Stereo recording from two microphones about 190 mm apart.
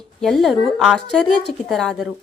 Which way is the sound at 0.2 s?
Centre (ahead or behind).